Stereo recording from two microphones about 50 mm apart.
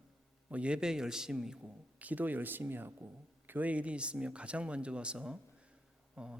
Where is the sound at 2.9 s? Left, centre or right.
Right.